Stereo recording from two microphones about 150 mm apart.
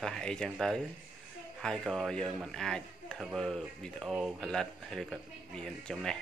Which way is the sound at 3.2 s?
Centre (ahead or behind).